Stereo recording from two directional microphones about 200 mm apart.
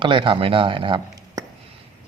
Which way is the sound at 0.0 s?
25° right (ahead or behind).